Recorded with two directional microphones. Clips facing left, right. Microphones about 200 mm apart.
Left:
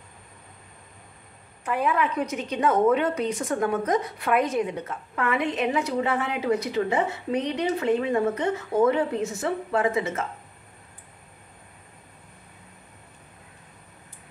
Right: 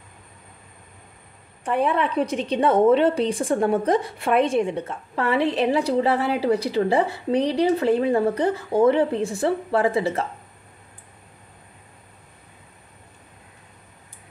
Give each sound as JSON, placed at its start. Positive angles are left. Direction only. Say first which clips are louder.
{"t": 1.6, "sound": "a woman's voice", "louder": "right 3 dB", "side_deg": -30}